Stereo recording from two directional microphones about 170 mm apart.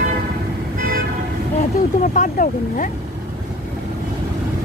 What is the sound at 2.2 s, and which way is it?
Speech, 50° left (ahead or behind).